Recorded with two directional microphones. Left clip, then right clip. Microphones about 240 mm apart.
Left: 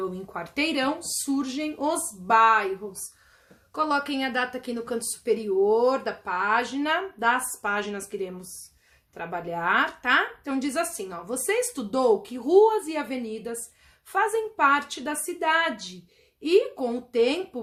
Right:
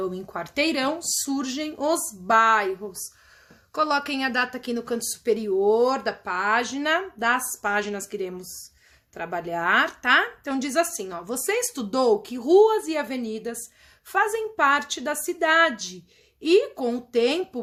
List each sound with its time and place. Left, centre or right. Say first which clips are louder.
0.1 s speech: right 2 dB; right